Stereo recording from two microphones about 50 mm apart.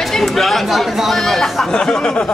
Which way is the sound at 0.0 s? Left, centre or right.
Centre.